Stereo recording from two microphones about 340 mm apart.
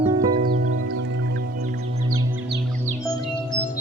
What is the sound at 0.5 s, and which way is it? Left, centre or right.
Music, right.